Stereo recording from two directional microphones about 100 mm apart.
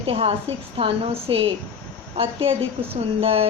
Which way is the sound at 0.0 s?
75° right (ahead or behind).